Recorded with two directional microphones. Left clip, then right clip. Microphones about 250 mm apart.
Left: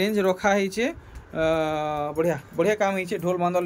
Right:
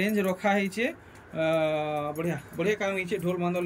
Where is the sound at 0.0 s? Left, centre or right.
Centre.